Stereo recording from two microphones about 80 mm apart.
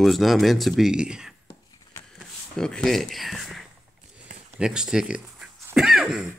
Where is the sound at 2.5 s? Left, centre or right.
Centre.